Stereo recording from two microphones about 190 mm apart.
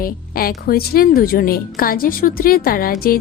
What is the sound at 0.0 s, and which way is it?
Speech, 50° left (ahead or behind).